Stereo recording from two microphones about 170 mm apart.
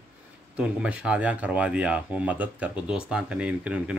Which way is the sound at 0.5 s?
5° right (ahead or behind).